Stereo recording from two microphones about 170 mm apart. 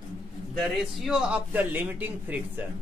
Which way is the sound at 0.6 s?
Centre (ahead or behind).